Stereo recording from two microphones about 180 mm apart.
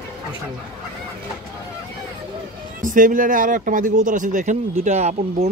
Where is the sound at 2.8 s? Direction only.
45° right (ahead or behind).